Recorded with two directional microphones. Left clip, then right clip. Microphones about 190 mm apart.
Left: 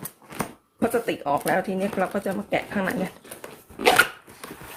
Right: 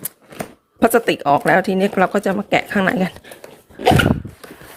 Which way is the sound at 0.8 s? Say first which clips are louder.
Right 9 dB; 45° right (ahead or behind).